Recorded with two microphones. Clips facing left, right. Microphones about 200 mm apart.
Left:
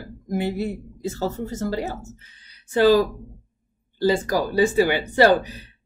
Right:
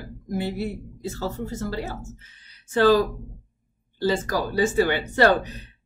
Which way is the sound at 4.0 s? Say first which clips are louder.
Left 3 dB; 15° left (ahead or behind).